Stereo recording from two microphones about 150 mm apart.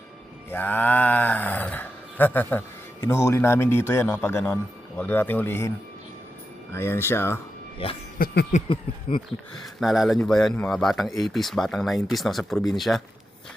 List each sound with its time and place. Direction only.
0.5 s speech: 10° left (ahead or behind)
6.7 s speech: 15° left (ahead or behind)
7.8 s speech: 35° left (ahead or behind)
8.2 s a sound: 75° left (ahead or behind)
8.7 s speech: 35° left (ahead or behind)
9.6 s a man's voice: centre (ahead or behind)